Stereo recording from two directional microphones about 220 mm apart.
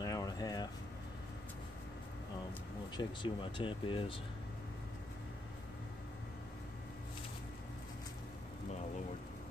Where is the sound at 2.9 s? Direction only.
20° left (ahead or behind).